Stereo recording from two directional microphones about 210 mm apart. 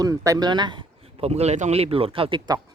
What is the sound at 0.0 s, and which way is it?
Speech, 15° right (ahead or behind).